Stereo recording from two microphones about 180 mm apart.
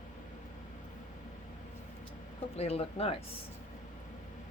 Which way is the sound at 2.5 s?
35° left (ahead or behind).